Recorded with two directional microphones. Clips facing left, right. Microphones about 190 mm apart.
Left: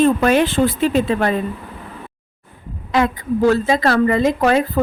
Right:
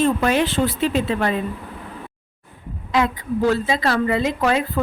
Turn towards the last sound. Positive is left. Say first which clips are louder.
# left 4 dB
turn(degrees=45)  # may be behind; listen again after turning